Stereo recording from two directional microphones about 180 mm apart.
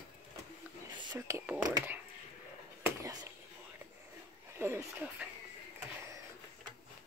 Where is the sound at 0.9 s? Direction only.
25° right (ahead or behind).